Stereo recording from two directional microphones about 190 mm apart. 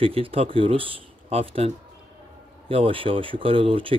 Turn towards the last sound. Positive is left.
turn(degrees=-30)  # may be behind; listen again after turning